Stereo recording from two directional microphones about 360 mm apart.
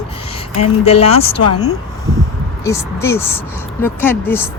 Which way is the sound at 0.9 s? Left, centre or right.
Centre.